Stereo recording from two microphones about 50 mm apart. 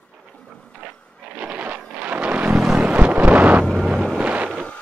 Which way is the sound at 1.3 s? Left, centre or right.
Right.